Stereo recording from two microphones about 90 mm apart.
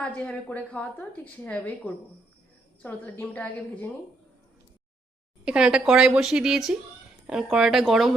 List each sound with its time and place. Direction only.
0.0 s a woman's voice: 10° left (ahead or behind)
5.5 s a woman's voice: 10° right (ahead or behind)